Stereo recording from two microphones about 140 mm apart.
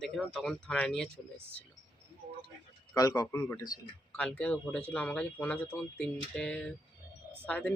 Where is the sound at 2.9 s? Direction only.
25° left (ahead or behind).